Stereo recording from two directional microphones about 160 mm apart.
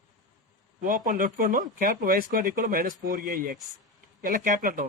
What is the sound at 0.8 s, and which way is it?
Speech, 55° right (ahead or behind).